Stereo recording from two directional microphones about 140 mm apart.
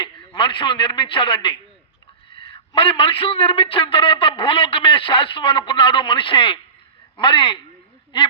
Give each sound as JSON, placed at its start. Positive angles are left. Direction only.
{"t": 0.3, "sound": "a man's voice", "side_deg": 35}